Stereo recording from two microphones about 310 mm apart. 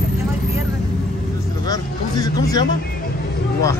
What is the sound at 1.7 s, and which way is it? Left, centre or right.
Music, centre.